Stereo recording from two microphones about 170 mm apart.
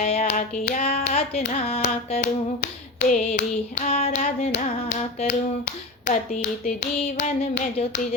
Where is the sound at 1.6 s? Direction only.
35° left (ahead or behind).